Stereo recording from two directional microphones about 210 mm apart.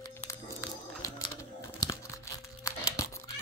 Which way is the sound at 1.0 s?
15° left (ahead or behind).